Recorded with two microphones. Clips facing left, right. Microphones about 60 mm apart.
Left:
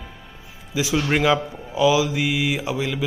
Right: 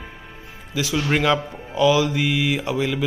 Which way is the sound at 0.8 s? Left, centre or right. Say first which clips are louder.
Left 1 dB; centre.